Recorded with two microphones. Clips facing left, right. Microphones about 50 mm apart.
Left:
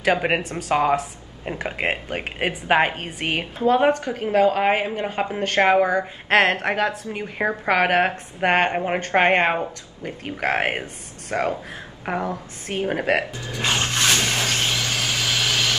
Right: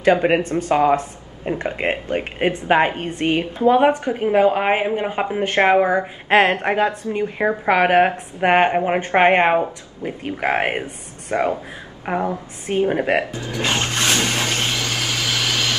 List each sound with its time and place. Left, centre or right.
0.0 s a woman's voice: centre
3.6 s a woman's voice: centre
13.3 s a sound: right